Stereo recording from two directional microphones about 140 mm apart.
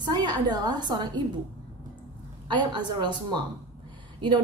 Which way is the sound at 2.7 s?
35° right (ahead or behind).